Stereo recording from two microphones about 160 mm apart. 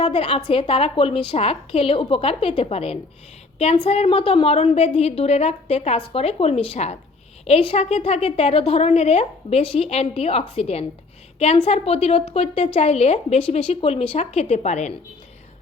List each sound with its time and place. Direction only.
0.1 s a woman's voice: 35° left (ahead or behind)